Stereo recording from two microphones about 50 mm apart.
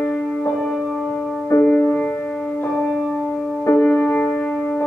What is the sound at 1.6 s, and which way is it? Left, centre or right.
Music, left.